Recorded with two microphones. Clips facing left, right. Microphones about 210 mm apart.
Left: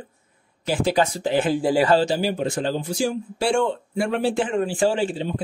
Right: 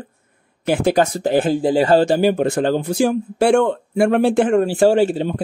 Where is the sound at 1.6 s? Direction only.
25° right (ahead or behind).